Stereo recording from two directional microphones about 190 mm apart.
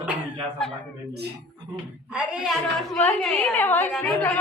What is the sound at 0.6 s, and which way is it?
Speech, 5° left (ahead or behind).